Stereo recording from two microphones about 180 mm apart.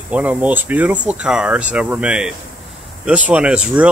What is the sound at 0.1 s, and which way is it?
Speech, 10° right (ahead or behind).